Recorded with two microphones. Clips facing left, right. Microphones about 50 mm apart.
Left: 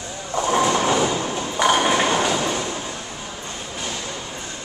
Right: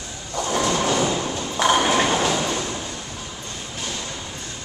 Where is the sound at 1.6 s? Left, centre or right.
Centre.